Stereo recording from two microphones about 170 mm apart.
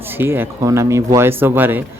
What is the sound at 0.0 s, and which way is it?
Speech, 10° right (ahead or behind).